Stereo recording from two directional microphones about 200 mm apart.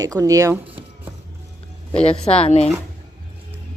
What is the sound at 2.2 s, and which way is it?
Speech, 30° left (ahead or behind).